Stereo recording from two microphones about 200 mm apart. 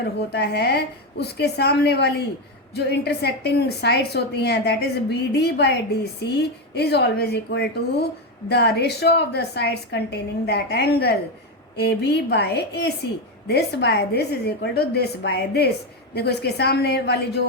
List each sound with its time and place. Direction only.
0.2 s a woman's voice: 55° left (ahead or behind)